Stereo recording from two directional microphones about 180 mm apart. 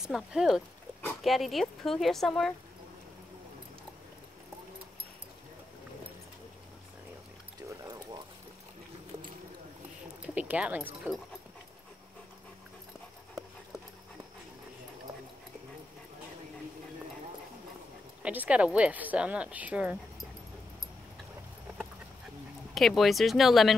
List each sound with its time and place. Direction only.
0.0 s speech: 5° right (ahead or behind)
7.8 s pour: 20° right (ahead or behind)
10.2 s speech: 5° right (ahead or behind)
18.2 s speech: 10° right (ahead or behind)
22.8 s speech: centre (ahead or behind)